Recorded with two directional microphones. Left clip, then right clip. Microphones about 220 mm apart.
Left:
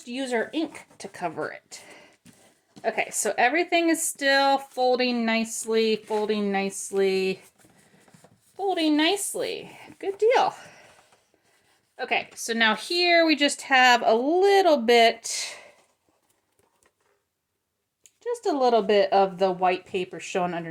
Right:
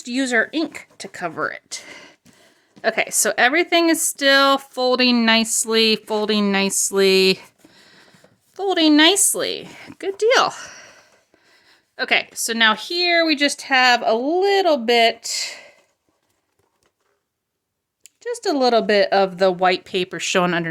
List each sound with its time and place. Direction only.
0.0 s a woman's voice: 35° right (ahead or behind)
8.5 s a woman's voice: 40° right (ahead or behind)
11.9 s speech: 35° right (ahead or behind); by 15.6 s 15° right (ahead or behind)
18.0 s a woman's voice: 25° right (ahead or behind)